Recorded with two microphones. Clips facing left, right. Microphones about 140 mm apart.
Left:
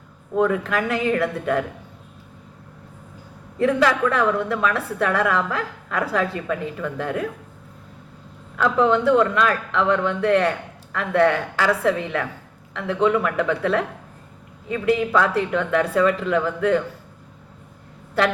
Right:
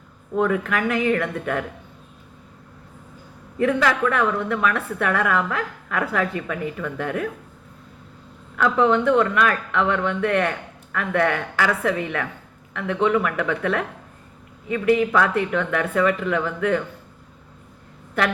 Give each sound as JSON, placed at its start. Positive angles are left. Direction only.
{"t": 0.4, "sound": "a woman's voice", "side_deg": 30}
{"t": 3.6, "sound": "a woman's voice", "side_deg": 30}
{"t": 8.5, "sound": "a woman's voice", "side_deg": 30}